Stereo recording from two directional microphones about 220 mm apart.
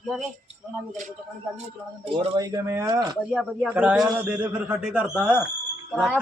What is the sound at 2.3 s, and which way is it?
Speech, 15° right (ahead or behind).